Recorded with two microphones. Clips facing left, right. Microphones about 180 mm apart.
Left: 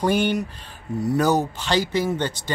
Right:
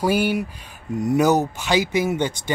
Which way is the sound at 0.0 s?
5° right (ahead or behind).